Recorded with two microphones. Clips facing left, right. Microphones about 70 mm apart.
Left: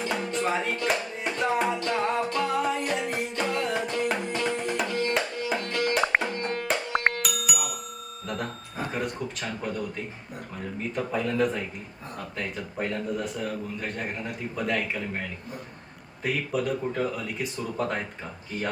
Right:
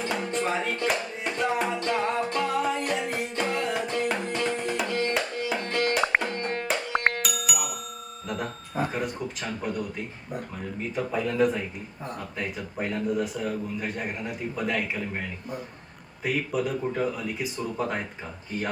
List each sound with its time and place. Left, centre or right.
0.0 s music: centre
5.5 s music: right
5.9 s music: centre
6.3 s music: right
6.7 s music: centre
8.3 s a sound: centre
10.9 s a man's voice: centre
16.2 s a man's voice: centre